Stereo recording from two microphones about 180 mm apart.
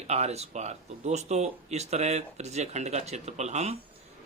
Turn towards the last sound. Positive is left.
turn(degrees=-40)  # may be behind; listen again after turning